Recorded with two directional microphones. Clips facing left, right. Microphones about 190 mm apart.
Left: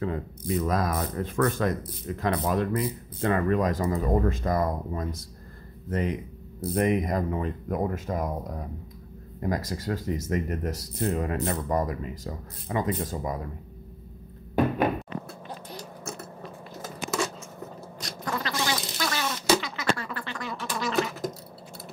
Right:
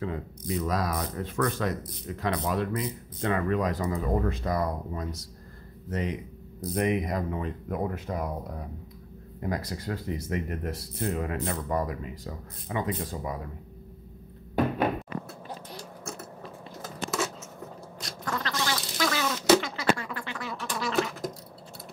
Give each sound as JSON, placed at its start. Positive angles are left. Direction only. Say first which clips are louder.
{"t": 0.0, "sound": "speech", "louder": "left 3 dB", "side_deg": 50}
{"t": 9.4, "sound": "speech", "louder": "left 3 dB", "side_deg": 45}
{"t": 15.2, "sound": "chewing", "louder": "left 1 dB", "side_deg": 0}
{"t": 18.2, "sound": "cat", "louder": "left 1 dB", "side_deg": 10}
{"t": 18.9, "sound": "a sound", "louder": "right 2 dB", "side_deg": -80}
{"t": 19.6, "sound": "a sound", "louder": "right 1 dB", "side_deg": -35}
{"t": 20.0, "sound": "duck", "louder": "left 1 dB", "side_deg": -10}